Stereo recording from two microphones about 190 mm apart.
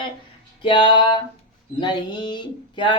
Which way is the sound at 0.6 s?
25° left (ahead or behind).